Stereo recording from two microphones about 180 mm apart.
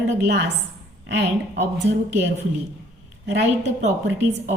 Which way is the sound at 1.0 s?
70° right (ahead or behind).